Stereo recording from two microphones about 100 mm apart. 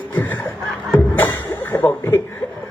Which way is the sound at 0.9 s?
20° left (ahead or behind).